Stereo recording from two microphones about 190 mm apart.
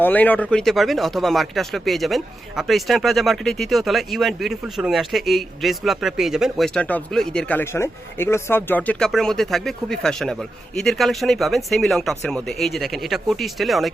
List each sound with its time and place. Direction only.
0.0 s speech: 10° left (ahead or behind)